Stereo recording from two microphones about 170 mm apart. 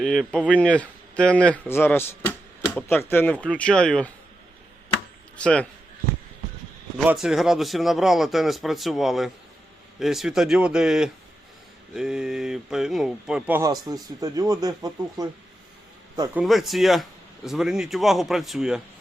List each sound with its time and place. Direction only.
0.0 s speech: centre (ahead or behind)
5.4 s speech: 5° left (ahead or behind)
7.1 s speech: 5° right (ahead or behind)
13.6 s speech: 20° right (ahead or behind)
16.3 s speech: centre (ahead or behind)